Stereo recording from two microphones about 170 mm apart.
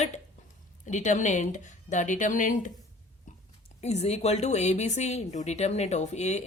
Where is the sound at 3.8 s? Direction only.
40° left (ahead or behind).